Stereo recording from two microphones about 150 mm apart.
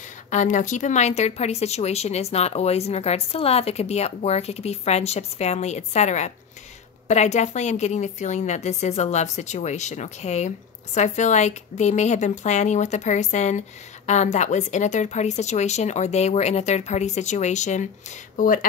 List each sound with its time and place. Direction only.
0.3 s speech: 55° left (ahead or behind)
18.3 s speech: 65° left (ahead or behind)